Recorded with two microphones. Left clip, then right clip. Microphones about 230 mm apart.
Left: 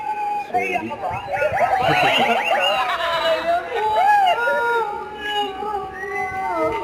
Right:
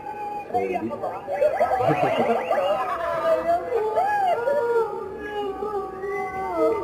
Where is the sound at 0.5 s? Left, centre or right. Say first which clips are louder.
Left 3 dB; left.